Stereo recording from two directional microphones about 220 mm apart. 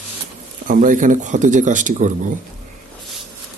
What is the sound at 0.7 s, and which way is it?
Speech, 35° right (ahead or behind).